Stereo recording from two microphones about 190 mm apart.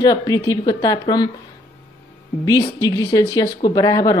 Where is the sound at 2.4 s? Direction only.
20° left (ahead or behind).